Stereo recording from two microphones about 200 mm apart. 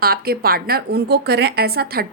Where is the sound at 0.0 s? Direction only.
50° right (ahead or behind).